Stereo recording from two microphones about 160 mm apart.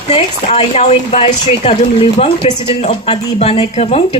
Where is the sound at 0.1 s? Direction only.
40° left (ahead or behind).